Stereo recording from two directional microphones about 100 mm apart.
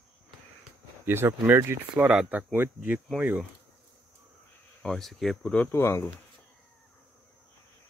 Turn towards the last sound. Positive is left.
turn(degrees=25)  # may be behind; listen again after turning